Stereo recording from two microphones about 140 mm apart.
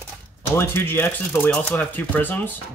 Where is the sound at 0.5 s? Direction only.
15° left (ahead or behind).